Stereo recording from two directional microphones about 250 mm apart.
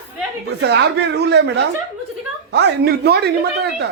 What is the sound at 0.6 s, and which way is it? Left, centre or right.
Speech, right.